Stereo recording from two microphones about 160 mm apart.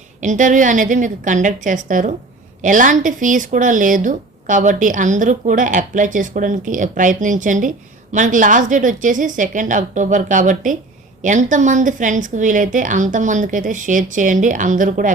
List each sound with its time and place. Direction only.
0.2 s speech: 50° right (ahead or behind)